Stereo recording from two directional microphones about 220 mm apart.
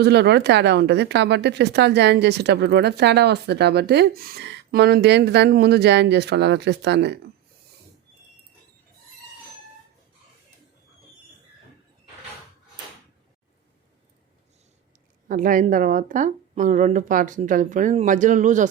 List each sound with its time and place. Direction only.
0.0 s speech: 50° right (ahead or behind)
15.3 s speech: 40° right (ahead or behind)